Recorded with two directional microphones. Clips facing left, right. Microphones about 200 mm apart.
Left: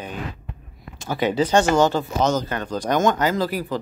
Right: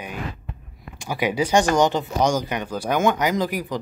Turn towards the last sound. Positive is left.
turn(degrees=-15)  # may be behind; listen again after turning